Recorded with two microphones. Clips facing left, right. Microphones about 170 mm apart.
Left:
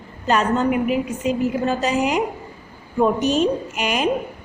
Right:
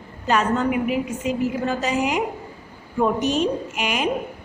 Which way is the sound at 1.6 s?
35° left (ahead or behind).